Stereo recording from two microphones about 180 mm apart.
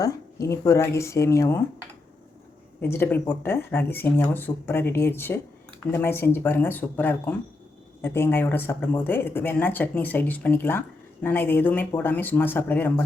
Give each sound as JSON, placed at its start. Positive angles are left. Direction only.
{"t": 0.0, "sound": "speech", "side_deg": 15}
{"t": 2.8, "sound": "speech", "side_deg": 15}